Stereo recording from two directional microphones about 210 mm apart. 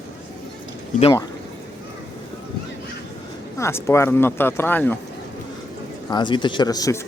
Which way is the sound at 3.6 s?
10° left (ahead or behind).